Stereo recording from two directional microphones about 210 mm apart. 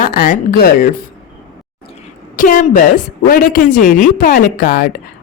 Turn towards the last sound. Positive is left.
turn(degrees=40)  # may be behind; listen again after turning